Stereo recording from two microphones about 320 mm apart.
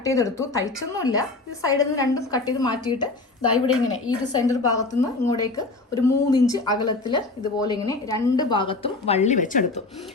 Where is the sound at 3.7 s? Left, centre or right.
Left.